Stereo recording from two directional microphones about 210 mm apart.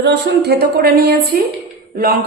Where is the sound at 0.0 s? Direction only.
55° right (ahead or behind).